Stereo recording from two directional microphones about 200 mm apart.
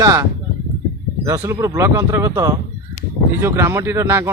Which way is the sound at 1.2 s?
15° right (ahead or behind).